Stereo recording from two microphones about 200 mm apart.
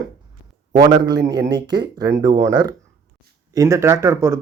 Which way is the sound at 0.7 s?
20° right (ahead or behind).